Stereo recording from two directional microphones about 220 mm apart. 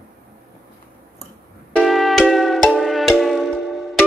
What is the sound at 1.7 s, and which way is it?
Music, centre (ahead or behind).